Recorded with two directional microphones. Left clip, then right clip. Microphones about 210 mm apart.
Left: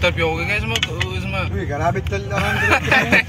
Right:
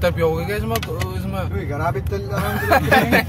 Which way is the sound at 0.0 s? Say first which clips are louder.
Even; 50° right (ahead or behind).